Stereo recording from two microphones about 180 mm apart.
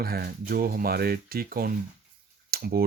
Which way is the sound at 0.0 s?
55° right (ahead or behind).